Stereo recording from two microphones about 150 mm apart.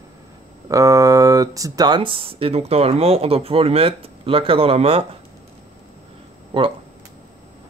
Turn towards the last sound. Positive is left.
turn(degrees=-35)  # may be behind; listen again after turning